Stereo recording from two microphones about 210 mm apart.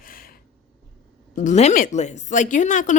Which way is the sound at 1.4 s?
35° left (ahead or behind).